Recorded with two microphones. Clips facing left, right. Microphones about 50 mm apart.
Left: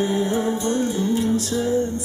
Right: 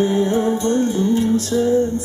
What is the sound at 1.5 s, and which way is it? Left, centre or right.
Speech, centre.